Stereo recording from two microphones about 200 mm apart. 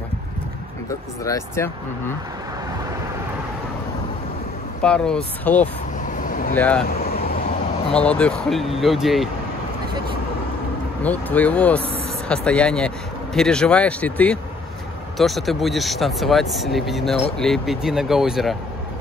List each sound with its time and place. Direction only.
1.2 s speech: 15° left (ahead or behind)
4.8 s speech: 5° left (ahead or behind)
6.1 s vehicle: 40° left (ahead or behind)
6.5 s speech: 10° left (ahead or behind)
7.9 s speech: 5° left (ahead or behind)
11.0 s speech: 10° left (ahead or behind)